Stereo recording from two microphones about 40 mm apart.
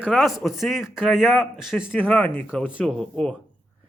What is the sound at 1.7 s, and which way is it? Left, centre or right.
Speech, left.